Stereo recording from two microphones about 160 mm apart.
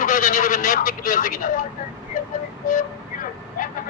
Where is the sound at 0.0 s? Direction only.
60° left (ahead or behind).